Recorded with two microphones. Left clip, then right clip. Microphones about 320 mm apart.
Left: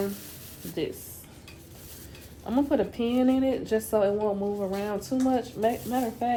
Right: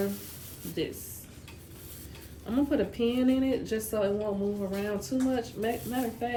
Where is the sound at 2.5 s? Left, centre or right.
Centre.